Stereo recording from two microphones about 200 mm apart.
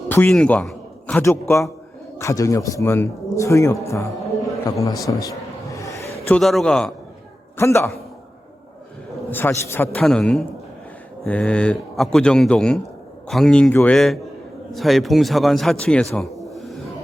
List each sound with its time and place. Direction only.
0.1 s a man's voice: 5° left (ahead or behind)
5.7 s a sound: 15° left (ahead or behind)
6.4 s a man's voice: centre (ahead or behind)
7.5 s a man's voice: 15° left (ahead or behind)
9.3 s a man's voice: 10° left (ahead or behind)